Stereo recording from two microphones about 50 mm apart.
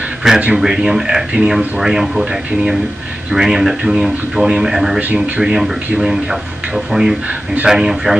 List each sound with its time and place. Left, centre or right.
0.2 s speech: centre
6.9 s speech: centre